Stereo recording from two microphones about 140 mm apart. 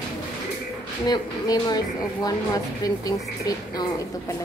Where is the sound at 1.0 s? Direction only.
30° left (ahead or behind).